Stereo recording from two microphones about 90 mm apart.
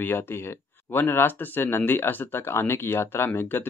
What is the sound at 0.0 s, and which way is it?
Speech, 25° left (ahead or behind).